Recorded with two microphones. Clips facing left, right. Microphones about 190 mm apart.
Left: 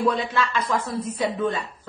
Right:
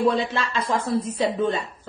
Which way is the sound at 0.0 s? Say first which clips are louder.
Right 1 dB; 25° right (ahead or behind).